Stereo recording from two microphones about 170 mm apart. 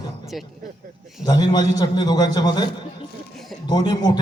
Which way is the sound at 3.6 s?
25° left (ahead or behind).